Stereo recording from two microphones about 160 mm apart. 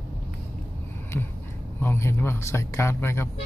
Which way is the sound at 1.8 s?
15° left (ahead or behind).